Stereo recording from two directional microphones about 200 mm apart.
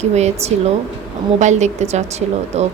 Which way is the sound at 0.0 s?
35° right (ahead or behind).